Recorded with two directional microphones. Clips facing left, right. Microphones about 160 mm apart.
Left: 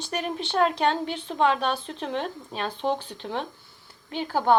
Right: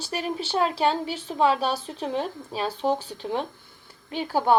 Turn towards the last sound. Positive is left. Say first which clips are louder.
# even
turn(degrees=-10)  # may be behind; listen again after turning